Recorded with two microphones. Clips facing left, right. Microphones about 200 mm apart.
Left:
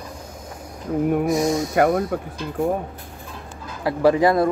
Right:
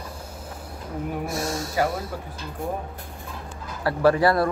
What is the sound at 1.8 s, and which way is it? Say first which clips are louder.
Speech: left 7 dB; 60° left (ahead or behind).